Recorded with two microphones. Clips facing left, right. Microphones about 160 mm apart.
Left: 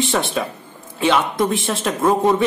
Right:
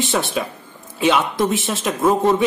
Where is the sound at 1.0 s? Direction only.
15° right (ahead or behind).